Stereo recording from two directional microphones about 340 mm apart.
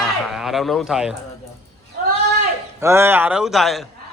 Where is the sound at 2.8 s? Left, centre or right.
Centre.